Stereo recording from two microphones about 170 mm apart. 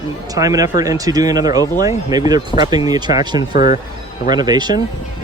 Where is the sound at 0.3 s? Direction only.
20° right (ahead or behind).